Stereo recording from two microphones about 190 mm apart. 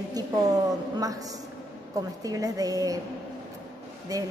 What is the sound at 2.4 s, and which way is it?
Speech, 20° right (ahead or behind).